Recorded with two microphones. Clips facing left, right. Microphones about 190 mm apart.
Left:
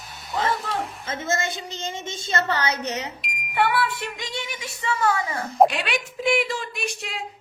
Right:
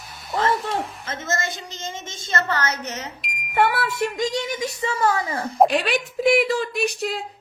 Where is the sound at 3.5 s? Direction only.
45° right (ahead or behind).